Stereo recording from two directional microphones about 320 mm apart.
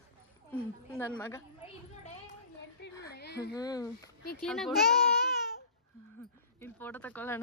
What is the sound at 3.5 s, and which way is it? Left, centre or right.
Speech, centre.